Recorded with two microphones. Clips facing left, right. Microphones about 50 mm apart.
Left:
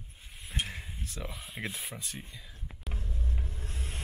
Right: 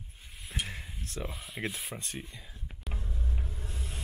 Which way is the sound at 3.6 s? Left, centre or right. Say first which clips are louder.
Even; left.